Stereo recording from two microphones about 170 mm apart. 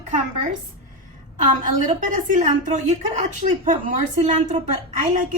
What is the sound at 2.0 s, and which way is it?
A woman's voice, 50° right (ahead or behind).